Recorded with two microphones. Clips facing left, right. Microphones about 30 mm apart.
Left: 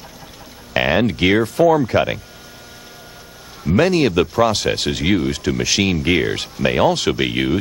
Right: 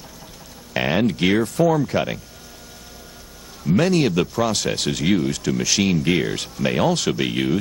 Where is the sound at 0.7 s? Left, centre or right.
Left.